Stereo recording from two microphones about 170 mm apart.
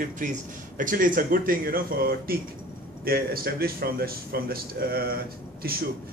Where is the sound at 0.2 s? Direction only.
50° right (ahead or behind).